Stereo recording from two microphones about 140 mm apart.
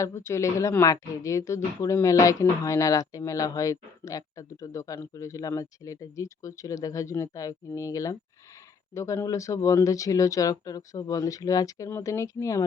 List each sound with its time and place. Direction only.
0.0 s a woman's voice: 20° left (ahead or behind)